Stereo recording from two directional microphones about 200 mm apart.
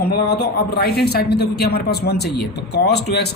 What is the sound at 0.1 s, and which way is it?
Speech, 55° left (ahead or behind).